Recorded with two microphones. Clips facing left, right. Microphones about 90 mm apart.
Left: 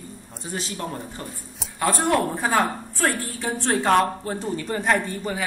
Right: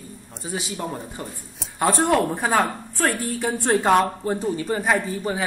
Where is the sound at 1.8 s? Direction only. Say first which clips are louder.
Right 3 dB; 30° right (ahead or behind).